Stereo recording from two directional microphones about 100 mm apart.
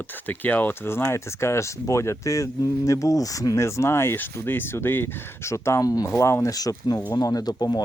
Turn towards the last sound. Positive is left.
turn(degrees=35)  # may be behind; listen again after turning